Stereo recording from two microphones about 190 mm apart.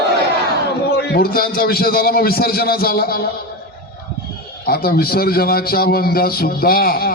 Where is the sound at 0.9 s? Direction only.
55° left (ahead or behind).